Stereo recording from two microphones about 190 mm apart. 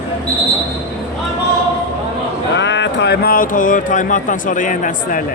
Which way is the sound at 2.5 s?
70° left (ahead or behind).